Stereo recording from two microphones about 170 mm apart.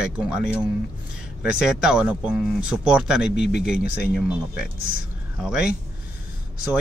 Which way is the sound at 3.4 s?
80° left.